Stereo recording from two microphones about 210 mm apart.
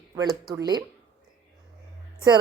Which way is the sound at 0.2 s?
15° right (ahead or behind).